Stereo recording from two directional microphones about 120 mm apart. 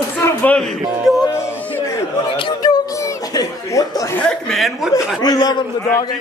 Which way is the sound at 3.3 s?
30° left (ahead or behind).